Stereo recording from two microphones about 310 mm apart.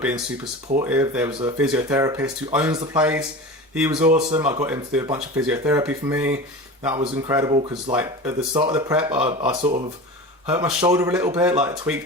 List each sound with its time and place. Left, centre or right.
0.8 s speech: centre
6.8 s speech: centre
10.4 s speech: centre